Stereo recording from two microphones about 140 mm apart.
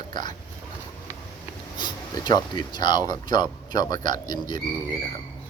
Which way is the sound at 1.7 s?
35° left (ahead or behind).